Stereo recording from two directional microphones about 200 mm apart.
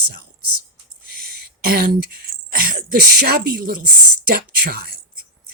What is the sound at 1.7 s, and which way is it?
Speech, 50° right (ahead or behind).